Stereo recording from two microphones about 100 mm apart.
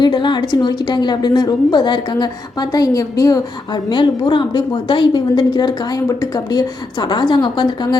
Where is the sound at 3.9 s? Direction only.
55° left (ahead or behind).